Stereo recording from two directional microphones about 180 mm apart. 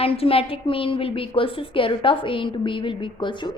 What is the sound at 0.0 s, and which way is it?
A woman's voice, 30° left (ahead or behind).